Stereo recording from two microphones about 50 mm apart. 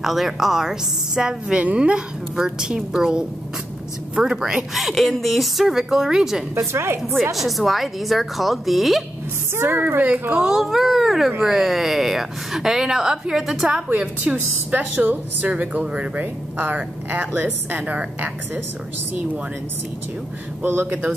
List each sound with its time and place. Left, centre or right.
0.0 s a woman's voice: centre
1.6 s a woman's voice: right
4.7 s a woman's voice: centre
6.5 s a woman's voice: right
7.3 s speech: centre
9.6 s a woman's voice: right
10.3 s a woman's voice: centre
13.8 s a woman's voice: right
16.7 s a woman's voice: right
20.6 s a woman's voice: right